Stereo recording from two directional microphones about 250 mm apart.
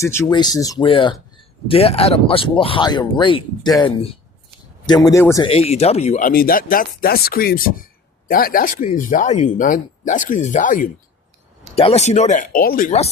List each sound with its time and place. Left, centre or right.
0.0 s speech: centre
5.5 s speech: left